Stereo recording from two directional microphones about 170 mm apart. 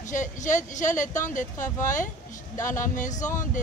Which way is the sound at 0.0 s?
45° left (ahead or behind).